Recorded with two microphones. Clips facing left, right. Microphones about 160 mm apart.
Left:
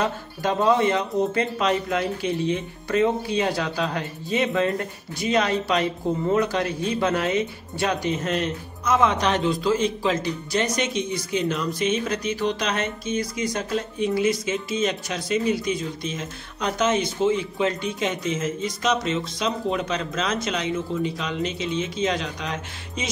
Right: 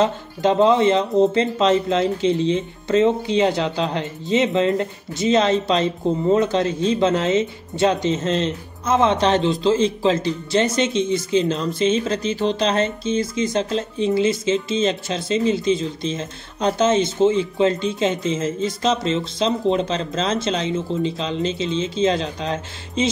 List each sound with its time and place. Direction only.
0.0 s speech: 20° right (ahead or behind)